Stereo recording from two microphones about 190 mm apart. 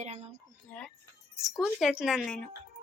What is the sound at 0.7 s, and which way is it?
A woman's voice, 10° left (ahead or behind).